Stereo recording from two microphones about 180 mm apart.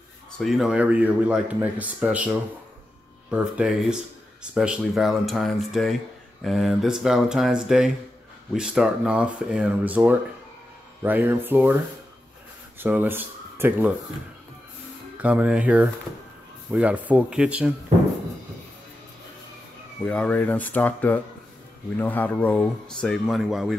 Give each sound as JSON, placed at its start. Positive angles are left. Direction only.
{"t": 0.4, "sound": "speech", "side_deg": 0}
{"t": 12.7, "sound": "speech", "side_deg": -10}
{"t": 15.1, "sound": "speech", "side_deg": -10}
{"t": 20.1, "sound": "speech", "side_deg": 5}